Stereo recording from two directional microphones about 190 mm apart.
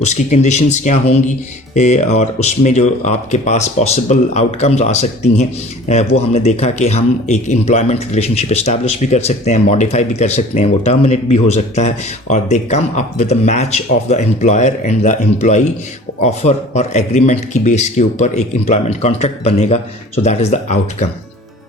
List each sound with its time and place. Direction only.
0.0 s speech: 35° left (ahead or behind)